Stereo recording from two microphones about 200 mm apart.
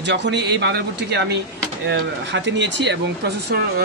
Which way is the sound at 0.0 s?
60° right (ahead or behind).